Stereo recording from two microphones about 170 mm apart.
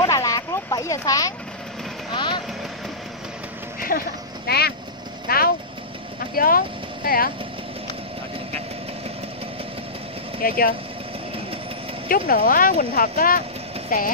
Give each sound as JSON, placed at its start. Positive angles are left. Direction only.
{"t": 0.0, "sound": "a sound", "side_deg": 20}
{"t": 2.1, "sound": "vehicle", "side_deg": 25}
{"t": 3.9, "sound": "speech", "side_deg": 55}
{"t": 4.5, "sound": "vehicle", "side_deg": 70}
{"t": 6.3, "sound": "speech", "side_deg": 55}
{"t": 10.4, "sound": "speech", "side_deg": 60}
{"t": 12.1, "sound": "speech", "side_deg": 55}